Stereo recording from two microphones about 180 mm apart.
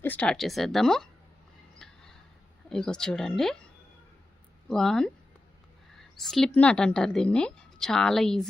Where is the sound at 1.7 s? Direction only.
5° left (ahead or behind).